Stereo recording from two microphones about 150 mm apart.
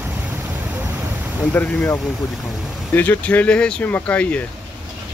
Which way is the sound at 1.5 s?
10° left (ahead or behind).